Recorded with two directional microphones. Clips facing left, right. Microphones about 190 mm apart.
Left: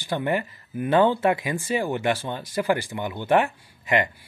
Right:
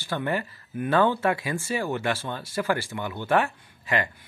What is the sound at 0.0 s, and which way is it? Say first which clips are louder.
Speech: left 3 dB; 15° left (ahead or behind).